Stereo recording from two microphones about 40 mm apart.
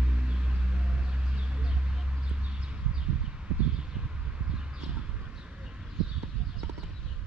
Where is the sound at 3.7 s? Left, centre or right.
Right.